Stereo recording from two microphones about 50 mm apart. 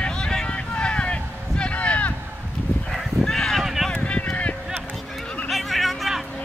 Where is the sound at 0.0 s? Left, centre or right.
Centre.